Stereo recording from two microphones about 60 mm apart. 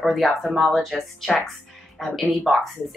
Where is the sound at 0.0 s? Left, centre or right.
Centre.